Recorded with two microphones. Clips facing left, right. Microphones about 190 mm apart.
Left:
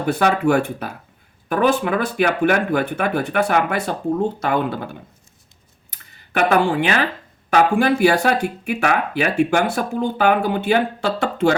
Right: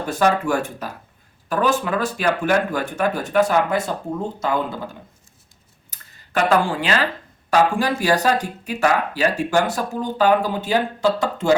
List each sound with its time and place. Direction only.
0.0 s speech: 60° left (ahead or behind)